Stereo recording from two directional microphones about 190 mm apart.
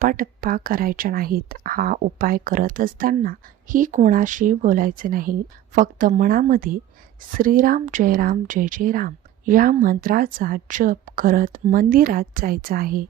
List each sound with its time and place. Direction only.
0.0 s a woman's voice: 45° right (ahead or behind)